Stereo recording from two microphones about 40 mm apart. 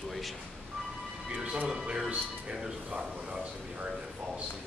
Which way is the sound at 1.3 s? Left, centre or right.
Right.